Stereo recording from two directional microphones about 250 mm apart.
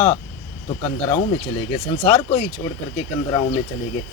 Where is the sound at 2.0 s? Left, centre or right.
Centre.